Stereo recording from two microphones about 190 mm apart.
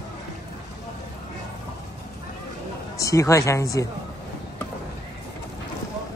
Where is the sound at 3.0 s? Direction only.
15° left (ahead or behind).